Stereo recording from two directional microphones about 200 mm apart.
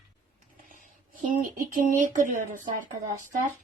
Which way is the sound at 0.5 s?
40° right (ahead or behind).